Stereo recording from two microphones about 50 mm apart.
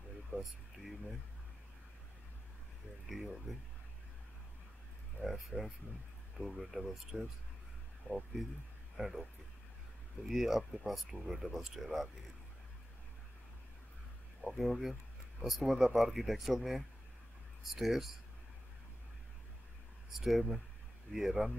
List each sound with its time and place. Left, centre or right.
0.3 s speech: left
3.1 s speech: centre
5.2 s speech: centre
8.9 s speech: centre
14.4 s speech: centre
20.1 s speech: centre